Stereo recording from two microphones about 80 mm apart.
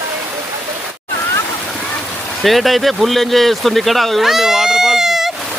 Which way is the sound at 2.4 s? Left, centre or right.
Centre.